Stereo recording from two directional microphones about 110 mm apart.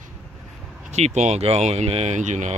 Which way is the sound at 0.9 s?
90° right.